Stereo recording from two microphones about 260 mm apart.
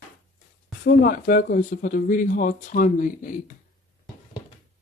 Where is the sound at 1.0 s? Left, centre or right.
Left.